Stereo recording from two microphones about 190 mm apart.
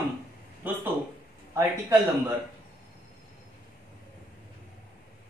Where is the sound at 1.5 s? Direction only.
15° right (ahead or behind).